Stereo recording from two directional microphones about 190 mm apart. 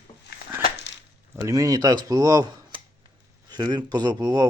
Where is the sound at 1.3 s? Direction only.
15° right (ahead or behind).